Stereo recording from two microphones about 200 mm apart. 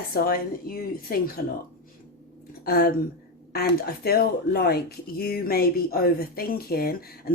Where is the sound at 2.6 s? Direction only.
55° left (ahead or behind).